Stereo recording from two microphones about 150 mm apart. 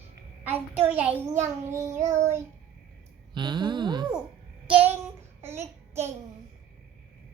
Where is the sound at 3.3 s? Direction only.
30° right (ahead or behind).